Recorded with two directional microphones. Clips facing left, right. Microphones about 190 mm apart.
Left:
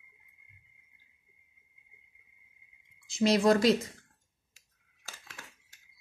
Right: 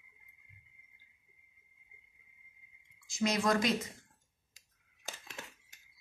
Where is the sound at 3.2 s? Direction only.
30° left (ahead or behind).